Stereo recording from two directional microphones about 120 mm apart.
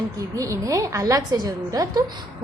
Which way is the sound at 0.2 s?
25° right (ahead or behind).